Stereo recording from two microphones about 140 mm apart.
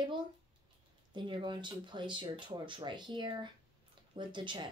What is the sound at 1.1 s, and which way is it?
Speech, 35° right (ahead or behind).